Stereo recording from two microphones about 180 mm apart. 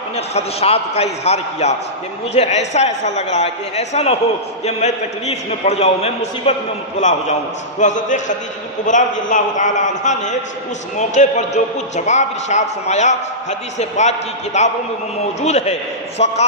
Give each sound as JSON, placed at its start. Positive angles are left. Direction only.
{"t": 0.1, "sound": "a man's voice", "side_deg": 35}